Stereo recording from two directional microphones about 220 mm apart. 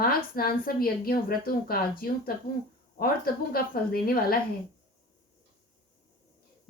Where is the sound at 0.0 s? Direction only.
40° left (ahead or behind).